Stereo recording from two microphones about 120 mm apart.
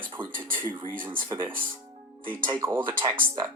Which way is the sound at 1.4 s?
15° right (ahead or behind).